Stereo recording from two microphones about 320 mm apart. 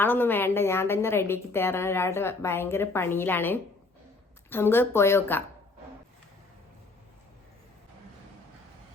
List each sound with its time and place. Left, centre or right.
0.0 s a woman's voice: centre